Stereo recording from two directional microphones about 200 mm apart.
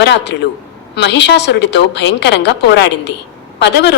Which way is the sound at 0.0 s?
60° left (ahead or behind).